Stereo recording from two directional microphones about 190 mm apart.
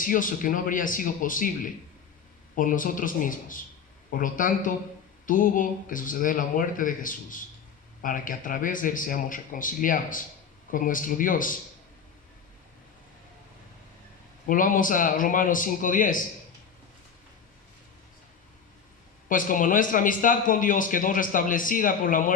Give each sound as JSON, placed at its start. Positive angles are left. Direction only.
{"t": 0.0, "sound": "speech", "side_deg": 45}
{"t": 14.4, "sound": "speech", "side_deg": 45}
{"t": 19.3, "sound": "speech", "side_deg": 45}